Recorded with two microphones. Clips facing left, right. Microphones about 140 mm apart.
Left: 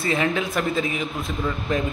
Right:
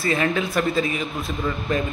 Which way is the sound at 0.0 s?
15° left (ahead or behind).